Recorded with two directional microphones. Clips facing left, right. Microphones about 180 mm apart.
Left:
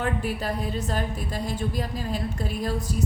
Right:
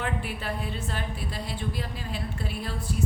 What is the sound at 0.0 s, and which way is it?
A woman's voice, 40° left (ahead or behind).